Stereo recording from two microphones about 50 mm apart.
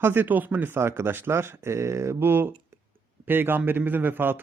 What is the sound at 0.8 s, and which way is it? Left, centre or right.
Speech, right.